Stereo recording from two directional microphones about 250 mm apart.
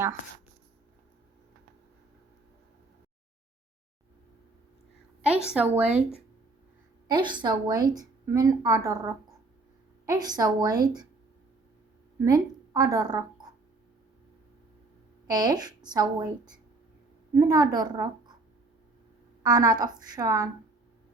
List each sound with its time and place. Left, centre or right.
5.5 s a woman's voice: centre
7.1 s a woman's voice: centre
12.2 s a woman's voice: centre
15.3 s a woman's voice: centre
19.4 s a woman's voice: centre